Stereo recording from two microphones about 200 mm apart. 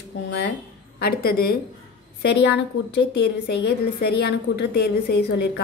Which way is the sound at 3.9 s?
55° left (ahead or behind).